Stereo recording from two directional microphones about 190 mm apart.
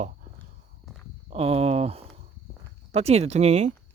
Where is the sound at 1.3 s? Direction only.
30° right (ahead or behind).